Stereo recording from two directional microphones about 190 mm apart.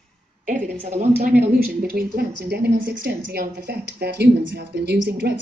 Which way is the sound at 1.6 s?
55° right (ahead or behind).